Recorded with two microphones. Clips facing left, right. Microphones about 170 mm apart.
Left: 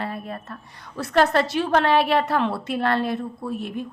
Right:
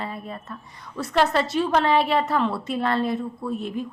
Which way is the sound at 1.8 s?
70° left (ahead or behind).